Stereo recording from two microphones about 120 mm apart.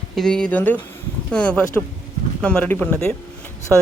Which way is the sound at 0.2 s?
5° left (ahead or behind).